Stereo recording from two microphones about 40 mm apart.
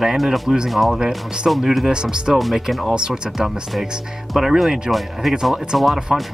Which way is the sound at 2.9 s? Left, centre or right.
Centre.